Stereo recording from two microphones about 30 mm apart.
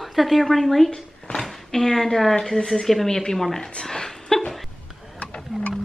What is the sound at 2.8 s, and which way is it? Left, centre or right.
Speech, centre.